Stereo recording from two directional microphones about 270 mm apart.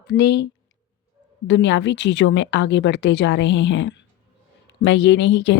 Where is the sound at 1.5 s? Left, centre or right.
Left.